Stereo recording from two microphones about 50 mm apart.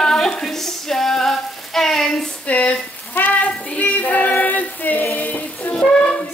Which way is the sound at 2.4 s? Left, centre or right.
Left.